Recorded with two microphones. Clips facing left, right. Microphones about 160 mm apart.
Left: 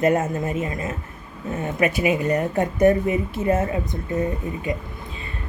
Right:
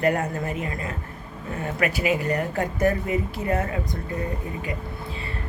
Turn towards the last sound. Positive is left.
turn(degrees=20)  # may be behind; listen again after turning